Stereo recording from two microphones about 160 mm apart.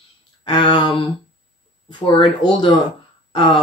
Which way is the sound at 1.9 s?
30° left (ahead or behind).